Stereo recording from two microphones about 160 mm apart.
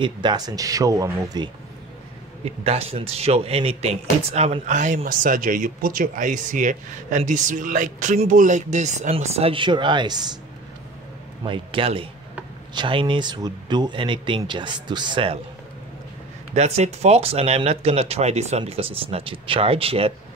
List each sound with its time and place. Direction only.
0.0 s speech: 30° right (ahead or behind)
2.4 s speech: 40° right (ahead or behind)
11.4 s speech: 30° right (ahead or behind)
16.5 s speech: 45° right (ahead or behind)